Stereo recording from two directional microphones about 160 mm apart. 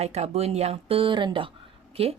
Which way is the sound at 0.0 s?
45° right (ahead or behind).